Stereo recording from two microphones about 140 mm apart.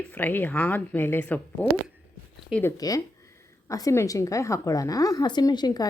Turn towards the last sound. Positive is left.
turn(degrees=30)  # may be behind; listen again after turning